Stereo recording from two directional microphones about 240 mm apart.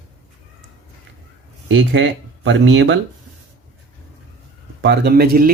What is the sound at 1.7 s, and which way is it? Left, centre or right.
Speech, right.